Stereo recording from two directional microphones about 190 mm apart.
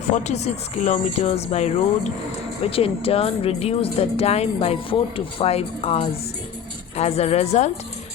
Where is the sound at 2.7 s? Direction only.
30° left (ahead or behind).